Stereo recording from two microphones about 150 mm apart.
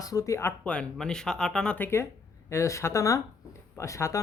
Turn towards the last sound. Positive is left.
turn(degrees=20)  # may be behind; listen again after turning